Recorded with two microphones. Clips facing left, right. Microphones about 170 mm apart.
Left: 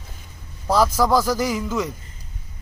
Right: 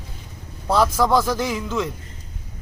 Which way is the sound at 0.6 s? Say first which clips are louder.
Even; 5° left (ahead or behind).